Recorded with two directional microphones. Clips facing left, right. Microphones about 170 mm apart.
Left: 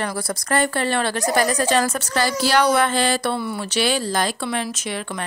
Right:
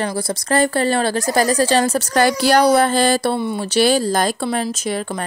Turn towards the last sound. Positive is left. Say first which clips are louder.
# right 5 dB
turn(degrees=-40)  # may be behind; listen again after turning